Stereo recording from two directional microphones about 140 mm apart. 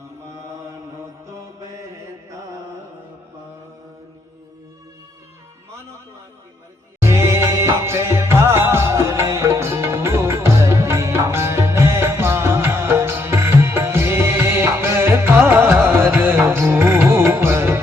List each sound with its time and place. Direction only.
0.3 s chant: 20° right (ahead or behind)
1.3 s mantra: 20° right (ahead or behind)
7.0 s music: 20° right (ahead or behind)